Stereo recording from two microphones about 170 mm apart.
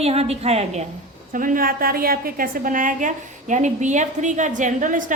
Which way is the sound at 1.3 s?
55° right (ahead or behind).